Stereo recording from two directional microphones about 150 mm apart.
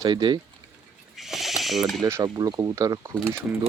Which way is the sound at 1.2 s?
Centre (ahead or behind).